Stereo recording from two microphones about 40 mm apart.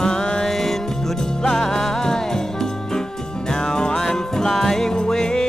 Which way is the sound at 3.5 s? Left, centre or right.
Centre.